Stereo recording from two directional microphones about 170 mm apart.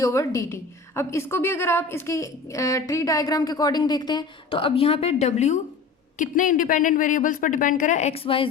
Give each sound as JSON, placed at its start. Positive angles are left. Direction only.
{"t": 0.0, "sound": "a woman's voice", "side_deg": 20}